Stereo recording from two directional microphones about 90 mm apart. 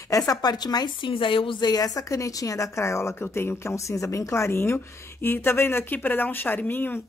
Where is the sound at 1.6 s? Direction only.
45° left (ahead or behind).